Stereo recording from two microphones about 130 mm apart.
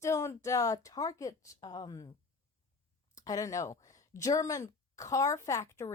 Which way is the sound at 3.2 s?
25° left (ahead or behind).